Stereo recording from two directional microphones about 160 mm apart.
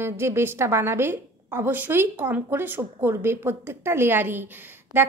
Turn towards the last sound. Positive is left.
turn(degrees=-15)  # may be behind; listen again after turning